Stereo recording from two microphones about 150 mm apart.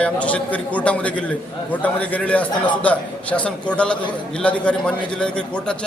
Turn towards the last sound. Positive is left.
turn(degrees=5)  # may be behind; listen again after turning